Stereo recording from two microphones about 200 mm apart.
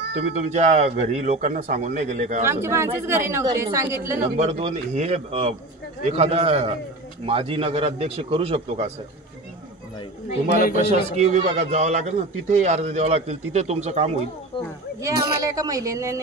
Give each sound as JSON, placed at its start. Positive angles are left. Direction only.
{"t": 0.5, "sound": "a man's voice", "side_deg": -35}
{"t": 2.4, "sound": "speech", "side_deg": -15}
{"t": 4.4, "sound": "a man's voice", "side_deg": -30}
{"t": 10.8, "sound": "a man's voice", "side_deg": -30}
{"t": 15.0, "sound": "speech", "side_deg": -15}